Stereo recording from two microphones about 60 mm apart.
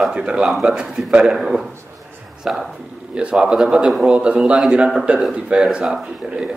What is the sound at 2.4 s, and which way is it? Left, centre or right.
A man's voice, centre.